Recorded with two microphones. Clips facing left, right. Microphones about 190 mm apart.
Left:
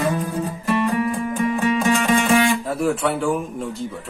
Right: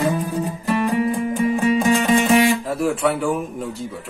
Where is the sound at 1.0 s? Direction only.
25° right (ahead or behind).